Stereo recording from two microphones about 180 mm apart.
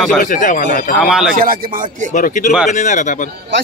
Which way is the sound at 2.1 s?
45° left (ahead or behind).